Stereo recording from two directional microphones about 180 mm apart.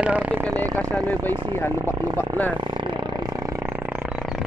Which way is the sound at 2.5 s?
25° right (ahead or behind).